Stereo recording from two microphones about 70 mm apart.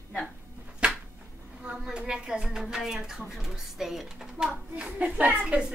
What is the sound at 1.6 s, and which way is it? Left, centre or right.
Speech, centre.